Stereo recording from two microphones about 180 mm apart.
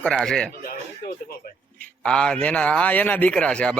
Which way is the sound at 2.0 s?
5° left (ahead or behind).